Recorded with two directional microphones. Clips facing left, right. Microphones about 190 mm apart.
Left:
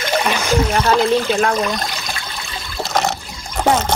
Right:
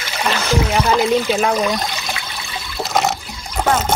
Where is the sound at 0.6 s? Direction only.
10° right (ahead or behind).